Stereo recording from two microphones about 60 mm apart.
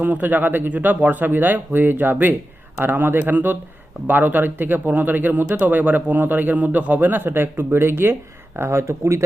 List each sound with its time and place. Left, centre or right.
0.0 s speech: right